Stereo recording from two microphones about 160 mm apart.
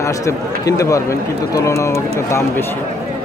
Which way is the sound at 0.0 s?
20° left (ahead or behind).